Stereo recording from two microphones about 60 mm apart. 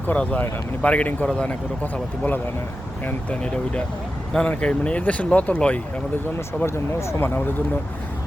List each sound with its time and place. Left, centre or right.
0.1 s speech: left
3.4 s speech: centre
6.6 s speech: left
7.2 s speech: left